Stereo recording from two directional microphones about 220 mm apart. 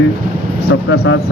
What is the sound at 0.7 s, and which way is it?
Speech, 50° left (ahead or behind).